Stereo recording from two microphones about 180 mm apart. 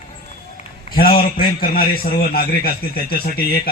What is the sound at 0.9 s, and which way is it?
A man's voice, 55° left (ahead or behind).